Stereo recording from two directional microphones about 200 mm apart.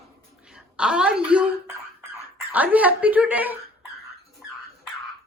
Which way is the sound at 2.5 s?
10° right (ahead or behind).